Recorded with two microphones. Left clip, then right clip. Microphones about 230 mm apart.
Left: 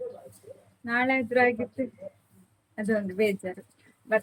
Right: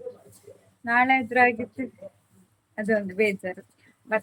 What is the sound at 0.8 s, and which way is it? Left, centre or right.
Speech, centre.